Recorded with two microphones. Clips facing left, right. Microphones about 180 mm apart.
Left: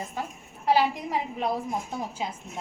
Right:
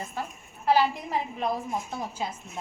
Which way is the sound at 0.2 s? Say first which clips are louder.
Left 1 dB; 15° left (ahead or behind).